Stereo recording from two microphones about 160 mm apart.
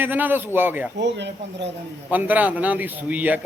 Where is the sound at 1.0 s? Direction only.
90° right.